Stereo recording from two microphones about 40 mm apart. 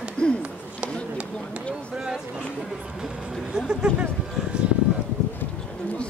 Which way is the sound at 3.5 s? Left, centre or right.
Right.